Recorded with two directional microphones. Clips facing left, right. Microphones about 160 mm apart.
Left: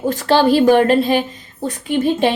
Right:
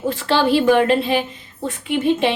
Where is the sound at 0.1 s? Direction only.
40° left (ahead or behind).